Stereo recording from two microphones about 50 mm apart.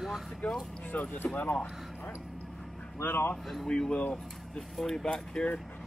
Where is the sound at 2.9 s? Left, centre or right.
Left.